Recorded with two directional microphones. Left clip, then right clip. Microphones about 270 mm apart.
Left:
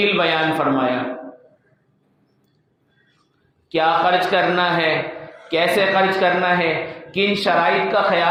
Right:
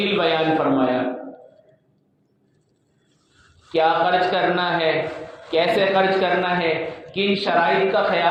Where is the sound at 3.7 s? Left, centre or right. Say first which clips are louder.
Left 1 dB; left.